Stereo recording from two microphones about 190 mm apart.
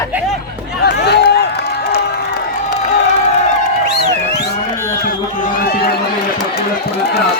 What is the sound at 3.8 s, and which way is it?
Music, 60° left (ahead or behind).